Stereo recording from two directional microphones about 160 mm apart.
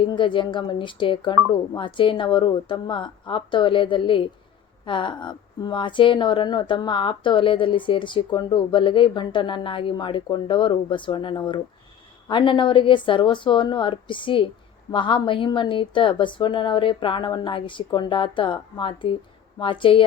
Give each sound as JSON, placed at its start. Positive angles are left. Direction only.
{"t": 0.0, "sound": "a woman's voice", "side_deg": 30}